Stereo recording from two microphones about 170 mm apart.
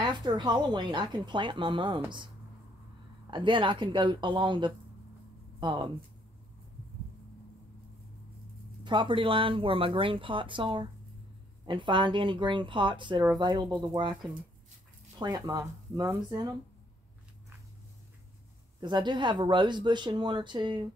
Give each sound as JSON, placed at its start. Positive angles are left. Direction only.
{"t": 0.0, "sound": "speech", "side_deg": -25}
{"t": 8.8, "sound": "speech", "side_deg": -30}
{"t": 15.1, "sound": "speech", "side_deg": -20}
{"t": 18.8, "sound": "speech", "side_deg": -25}